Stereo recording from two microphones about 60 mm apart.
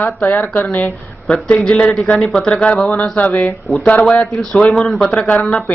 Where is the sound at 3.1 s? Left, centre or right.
Left; by 5.1 s centre.